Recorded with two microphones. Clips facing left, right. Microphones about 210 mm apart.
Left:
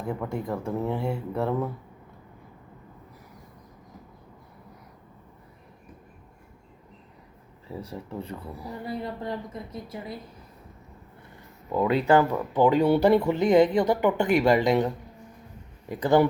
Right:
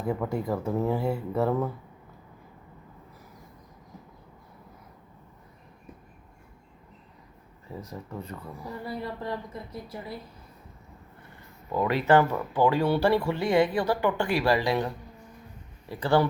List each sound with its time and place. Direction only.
0.0 s speech: 5° right (ahead or behind)
7.7 s speech: 5° left (ahead or behind)
8.6 s speech: 20° left (ahead or behind)
11.7 s speech: 10° left (ahead or behind)